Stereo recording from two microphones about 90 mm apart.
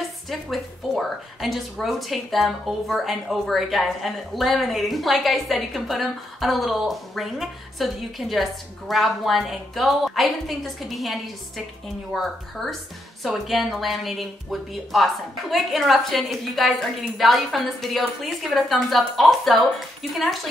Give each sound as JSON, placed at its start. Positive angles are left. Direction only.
{"t": 0.3, "sound": "speech", "side_deg": 0}